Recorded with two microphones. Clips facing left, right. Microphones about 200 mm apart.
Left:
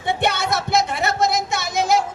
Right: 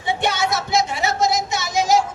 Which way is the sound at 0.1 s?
55° left (ahead or behind).